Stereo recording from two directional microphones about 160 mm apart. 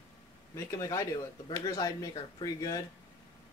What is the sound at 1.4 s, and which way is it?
Speech, 25° left (ahead or behind).